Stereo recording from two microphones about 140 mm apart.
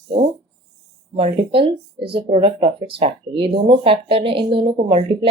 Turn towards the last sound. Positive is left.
turn(degrees=-40)  # may be behind; listen again after turning